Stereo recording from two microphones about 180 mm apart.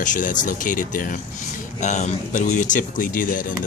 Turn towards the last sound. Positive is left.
turn(degrees=50)  # may be behind; listen again after turning